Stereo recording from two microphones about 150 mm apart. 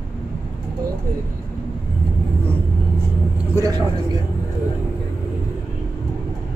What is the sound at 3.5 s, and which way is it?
Speech, 25° right (ahead or behind).